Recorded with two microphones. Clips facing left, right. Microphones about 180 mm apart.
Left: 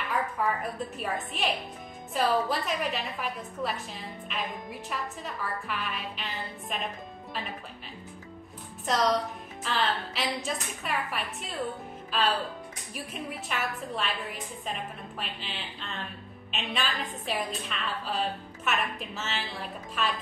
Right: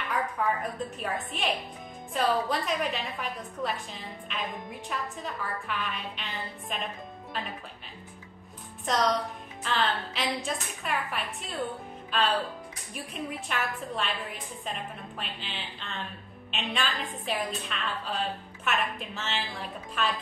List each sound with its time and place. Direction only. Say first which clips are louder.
0.6 s a woman's voice: even; centre (ahead or behind)
8.8 s a woman's voice: left 1 dB; centre (ahead or behind)